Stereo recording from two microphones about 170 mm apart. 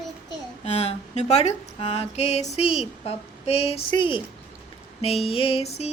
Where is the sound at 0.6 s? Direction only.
40° left (ahead or behind).